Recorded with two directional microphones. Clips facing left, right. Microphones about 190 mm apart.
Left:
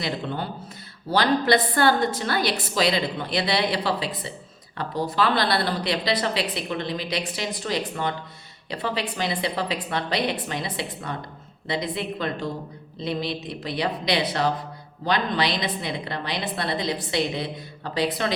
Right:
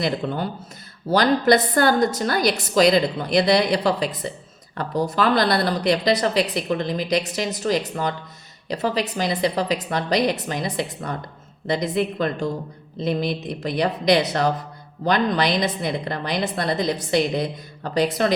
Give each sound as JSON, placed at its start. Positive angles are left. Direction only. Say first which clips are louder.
{"t": 1.5, "sound": "a woman's voice", "louder": "right 3 dB", "side_deg": -45}